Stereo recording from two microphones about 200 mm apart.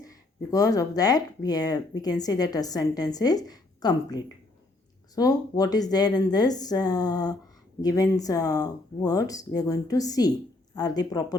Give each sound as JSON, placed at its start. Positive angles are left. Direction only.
{"t": 0.5, "sound": "a woman's voice", "side_deg": 15}